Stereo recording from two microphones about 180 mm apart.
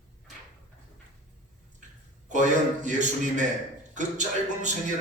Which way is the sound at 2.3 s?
40° right (ahead or behind).